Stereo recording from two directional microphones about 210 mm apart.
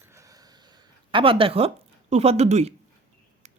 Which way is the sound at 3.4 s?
30° right (ahead or behind).